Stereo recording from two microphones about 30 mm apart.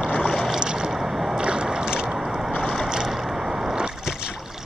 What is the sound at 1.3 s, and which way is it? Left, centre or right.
Boat, right.